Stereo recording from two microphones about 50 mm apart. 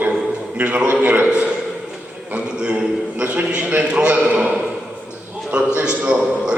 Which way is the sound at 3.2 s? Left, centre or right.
Right.